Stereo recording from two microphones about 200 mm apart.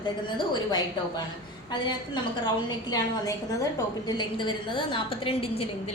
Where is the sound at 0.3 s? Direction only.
20° left (ahead or behind).